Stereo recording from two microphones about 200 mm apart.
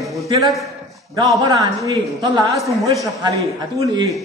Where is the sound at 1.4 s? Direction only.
20° right (ahead or behind).